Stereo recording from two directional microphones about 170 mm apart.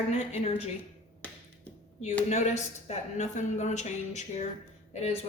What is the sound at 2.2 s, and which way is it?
A woman's voice, 40° left (ahead or behind).